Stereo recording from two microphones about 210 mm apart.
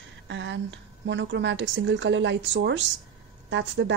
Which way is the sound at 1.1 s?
55° right (ahead or behind).